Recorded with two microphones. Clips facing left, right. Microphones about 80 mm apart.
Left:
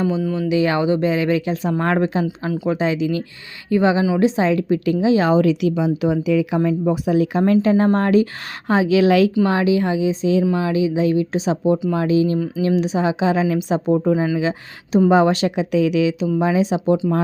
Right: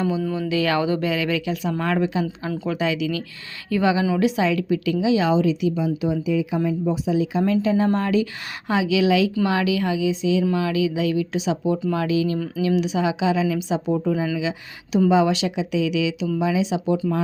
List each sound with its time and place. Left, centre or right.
0.3 s a woman's voice: left
9.4 s speech: left
13.9 s speech: left
15.1 s a woman's voice: left